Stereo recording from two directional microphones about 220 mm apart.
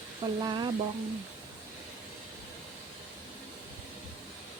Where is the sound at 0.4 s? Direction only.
20° right (ahead or behind).